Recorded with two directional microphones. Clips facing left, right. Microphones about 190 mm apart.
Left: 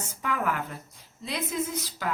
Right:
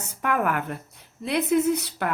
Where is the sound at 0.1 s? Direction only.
60° right (ahead or behind).